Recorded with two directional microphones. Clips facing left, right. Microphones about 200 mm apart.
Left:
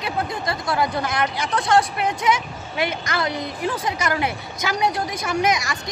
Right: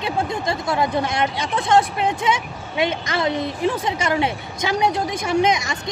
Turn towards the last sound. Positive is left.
turn(degrees=-25)  # may be behind; listen again after turning